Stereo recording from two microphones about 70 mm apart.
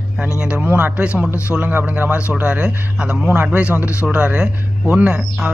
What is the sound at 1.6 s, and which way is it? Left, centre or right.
A man's voice, right.